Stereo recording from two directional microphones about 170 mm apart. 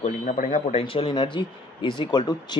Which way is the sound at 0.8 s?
30° left (ahead or behind).